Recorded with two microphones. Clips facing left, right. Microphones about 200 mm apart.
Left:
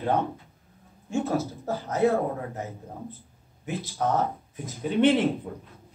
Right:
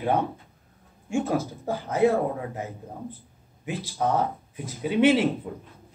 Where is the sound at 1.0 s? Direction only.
15° right (ahead or behind).